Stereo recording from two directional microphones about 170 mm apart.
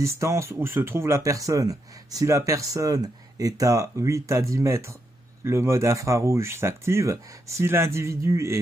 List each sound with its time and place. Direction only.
0.0 s speech: 15° right (ahead or behind)